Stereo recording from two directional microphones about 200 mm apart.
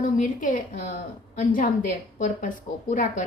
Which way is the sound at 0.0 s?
40° left (ahead or behind).